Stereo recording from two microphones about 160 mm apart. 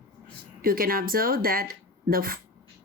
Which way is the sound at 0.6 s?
65° right (ahead or behind).